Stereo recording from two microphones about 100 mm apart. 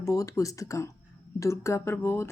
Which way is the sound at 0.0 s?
35° left (ahead or behind).